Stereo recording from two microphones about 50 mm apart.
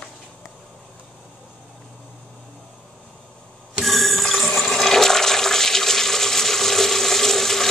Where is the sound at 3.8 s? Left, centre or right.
Centre.